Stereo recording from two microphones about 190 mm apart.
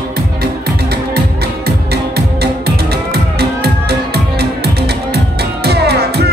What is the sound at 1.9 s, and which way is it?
Music, 55° right (ahead or behind).